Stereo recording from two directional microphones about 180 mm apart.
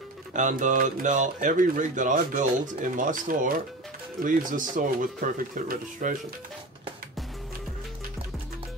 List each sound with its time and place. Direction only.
0.3 s speech: 45° right (ahead or behind)